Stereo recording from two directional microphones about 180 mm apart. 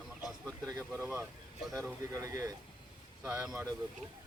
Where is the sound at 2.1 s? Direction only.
15° right (ahead or behind).